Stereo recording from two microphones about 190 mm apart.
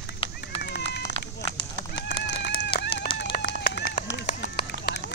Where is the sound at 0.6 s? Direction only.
60° left (ahead or behind).